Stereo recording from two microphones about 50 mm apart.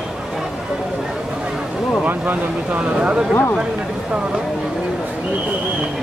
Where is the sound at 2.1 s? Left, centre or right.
Right.